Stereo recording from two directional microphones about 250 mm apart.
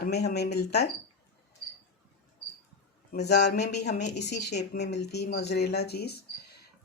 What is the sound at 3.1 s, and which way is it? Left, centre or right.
Speech, left.